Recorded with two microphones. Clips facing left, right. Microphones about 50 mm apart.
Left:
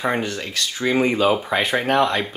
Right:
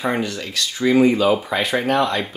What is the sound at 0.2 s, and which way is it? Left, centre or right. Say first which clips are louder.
Speech: right 1 dB; left.